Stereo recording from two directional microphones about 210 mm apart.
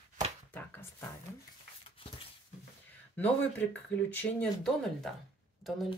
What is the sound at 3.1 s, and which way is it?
A woman's voice, 5° left (ahead or behind).